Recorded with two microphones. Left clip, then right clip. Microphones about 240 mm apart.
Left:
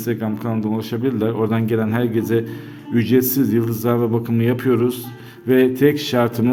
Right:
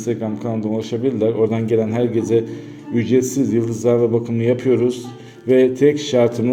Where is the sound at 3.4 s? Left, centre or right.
Left.